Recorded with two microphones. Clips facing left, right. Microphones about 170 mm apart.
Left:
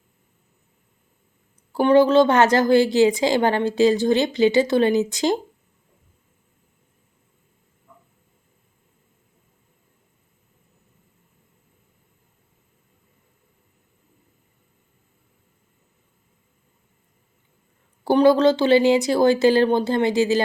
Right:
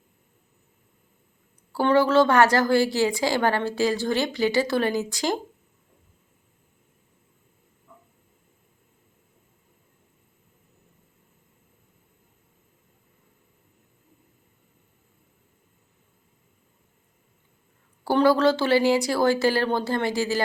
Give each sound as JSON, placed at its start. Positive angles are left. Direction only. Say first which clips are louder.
{"t": 1.7, "sound": "a woman's voice", "louder": "left 4 dB", "side_deg": 20}
{"t": 18.0, "sound": "a woman's voice", "louder": "left 4 dB", "side_deg": 20}